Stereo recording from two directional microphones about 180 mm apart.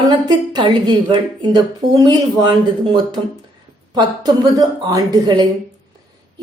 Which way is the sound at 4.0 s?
20° right (ahead or behind).